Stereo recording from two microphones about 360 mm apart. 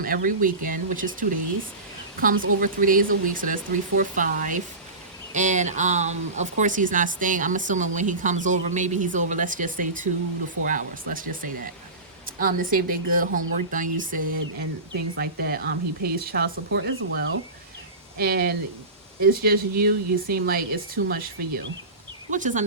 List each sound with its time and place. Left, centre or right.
0.0 s speech: right
2.2 s speech: right